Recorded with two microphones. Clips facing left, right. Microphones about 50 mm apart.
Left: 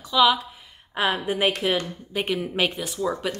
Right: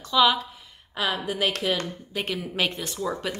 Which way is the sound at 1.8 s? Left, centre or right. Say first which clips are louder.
Left 3 dB; centre.